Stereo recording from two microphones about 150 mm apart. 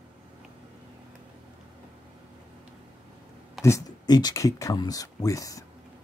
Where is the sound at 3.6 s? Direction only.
25° left (ahead or behind).